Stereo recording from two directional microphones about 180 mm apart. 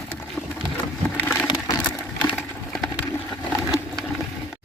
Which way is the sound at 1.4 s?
25° left (ahead or behind).